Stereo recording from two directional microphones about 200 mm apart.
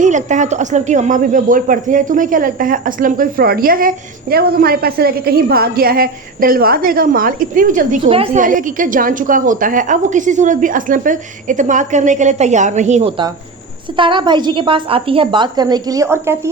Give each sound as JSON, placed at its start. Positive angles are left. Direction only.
{"t": 0.0, "sound": "speech", "side_deg": -35}
{"t": 8.0, "sound": "a woman's voice", "side_deg": -30}